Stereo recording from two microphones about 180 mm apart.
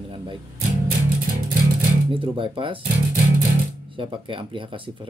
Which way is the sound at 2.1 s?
30° right (ahead or behind).